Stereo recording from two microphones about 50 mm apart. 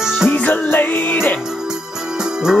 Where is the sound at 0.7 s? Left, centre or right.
Left.